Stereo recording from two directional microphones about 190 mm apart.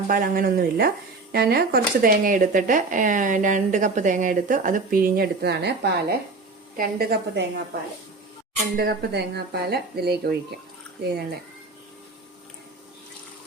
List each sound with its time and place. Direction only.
0.1 s speech: 50° right (ahead or behind)
8.7 s speech: 55° right (ahead or behind)